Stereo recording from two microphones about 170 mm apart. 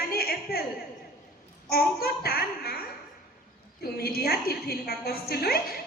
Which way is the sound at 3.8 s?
65° left (ahead or behind).